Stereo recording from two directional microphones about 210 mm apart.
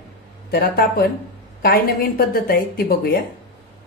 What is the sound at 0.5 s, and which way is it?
A woman's voice, 45° left (ahead or behind).